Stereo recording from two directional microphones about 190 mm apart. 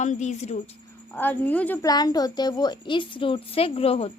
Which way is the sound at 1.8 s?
20° left (ahead or behind).